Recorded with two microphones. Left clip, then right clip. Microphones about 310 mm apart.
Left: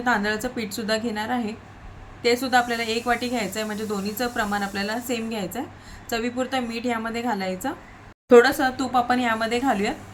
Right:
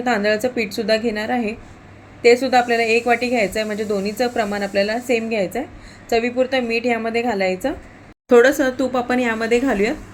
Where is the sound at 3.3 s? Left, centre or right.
Left.